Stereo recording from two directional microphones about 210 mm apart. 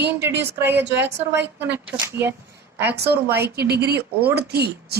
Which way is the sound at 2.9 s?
50° right (ahead or behind).